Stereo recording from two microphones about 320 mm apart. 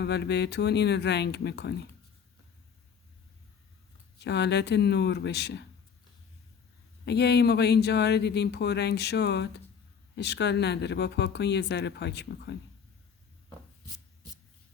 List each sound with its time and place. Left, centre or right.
0.0 s speech: left
4.2 s speech: left
7.0 s speech: left